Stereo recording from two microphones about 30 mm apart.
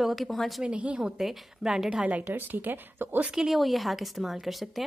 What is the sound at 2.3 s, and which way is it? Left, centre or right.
Speech, right.